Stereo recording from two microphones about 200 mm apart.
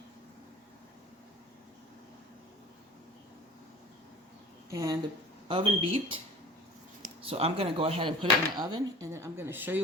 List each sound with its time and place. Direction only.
4.7 s a woman's voice: 15° right (ahead or behind)
5.5 s speech: 25° right (ahead or behind)
7.2 s speech: 30° right (ahead or behind); by 9.8 s 10° right (ahead or behind)